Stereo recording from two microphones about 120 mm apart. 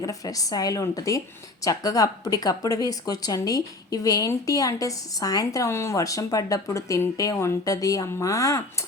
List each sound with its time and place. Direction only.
0.0 s speech: 30° left (ahead or behind)